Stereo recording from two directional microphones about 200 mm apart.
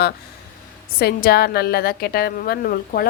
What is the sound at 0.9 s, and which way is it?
A woman's voice, 50° left (ahead or behind).